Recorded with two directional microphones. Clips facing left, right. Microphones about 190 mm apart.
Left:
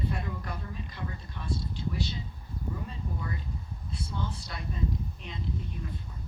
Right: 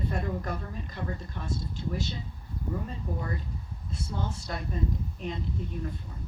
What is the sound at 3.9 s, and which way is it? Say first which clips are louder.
A woman's voice: right 2 dB; 45° right (ahead or behind).